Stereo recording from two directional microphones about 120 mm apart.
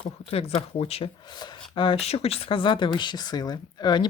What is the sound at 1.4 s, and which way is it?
Speech, 45° left (ahead or behind).